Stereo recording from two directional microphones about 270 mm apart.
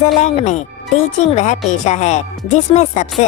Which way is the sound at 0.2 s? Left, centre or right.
Left.